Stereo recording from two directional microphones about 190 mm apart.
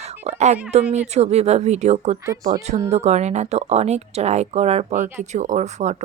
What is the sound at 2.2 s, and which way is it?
Speech, 15° right (ahead or behind).